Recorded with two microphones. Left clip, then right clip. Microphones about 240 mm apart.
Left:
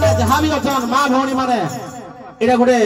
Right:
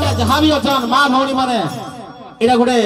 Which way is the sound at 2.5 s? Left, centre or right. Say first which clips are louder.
Left 1 dB; right.